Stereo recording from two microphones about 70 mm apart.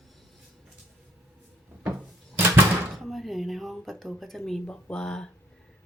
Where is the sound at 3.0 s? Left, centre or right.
Centre.